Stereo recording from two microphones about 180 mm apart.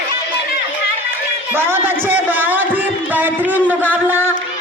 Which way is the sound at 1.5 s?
10° right (ahead or behind).